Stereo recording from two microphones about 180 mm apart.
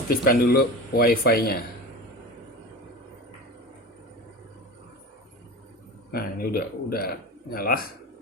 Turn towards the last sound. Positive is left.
turn(degrees=55)  # may be behind; listen again after turning